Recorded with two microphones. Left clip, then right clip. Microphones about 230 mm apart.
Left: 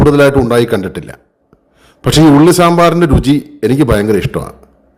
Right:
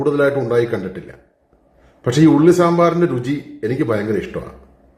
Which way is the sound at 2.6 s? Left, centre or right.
Left.